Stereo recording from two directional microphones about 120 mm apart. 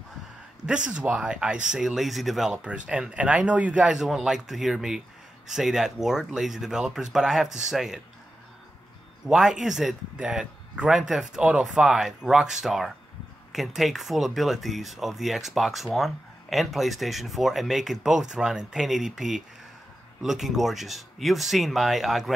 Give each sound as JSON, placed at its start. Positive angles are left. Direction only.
{"t": 0.7, "sound": "speech", "side_deg": -10}
{"t": 9.2, "sound": "speech", "side_deg": -5}